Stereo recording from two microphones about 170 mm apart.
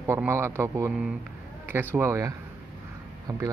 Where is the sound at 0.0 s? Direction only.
15° right (ahead or behind).